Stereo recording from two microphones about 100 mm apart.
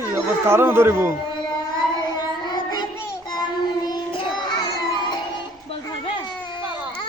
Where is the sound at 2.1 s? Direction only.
50° left (ahead or behind).